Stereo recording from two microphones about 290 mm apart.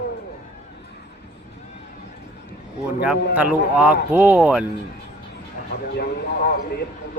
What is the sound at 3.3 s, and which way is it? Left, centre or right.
A man's voice, centre.